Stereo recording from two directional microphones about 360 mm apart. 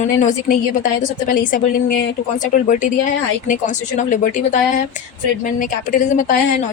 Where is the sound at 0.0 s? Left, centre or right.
Left.